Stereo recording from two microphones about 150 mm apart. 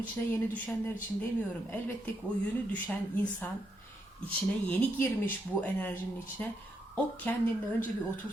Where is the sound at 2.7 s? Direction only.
10° left (ahead or behind).